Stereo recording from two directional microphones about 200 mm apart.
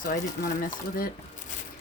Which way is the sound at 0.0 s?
45° left (ahead or behind).